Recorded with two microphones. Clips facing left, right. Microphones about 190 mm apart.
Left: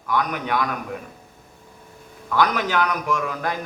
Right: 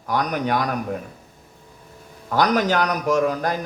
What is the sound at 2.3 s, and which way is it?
A man's voice, 40° right (ahead or behind).